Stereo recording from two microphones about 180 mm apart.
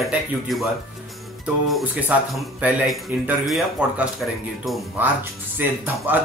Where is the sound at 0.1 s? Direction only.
Centre (ahead or behind).